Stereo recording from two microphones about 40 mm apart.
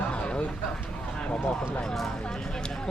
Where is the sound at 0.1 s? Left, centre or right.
Left.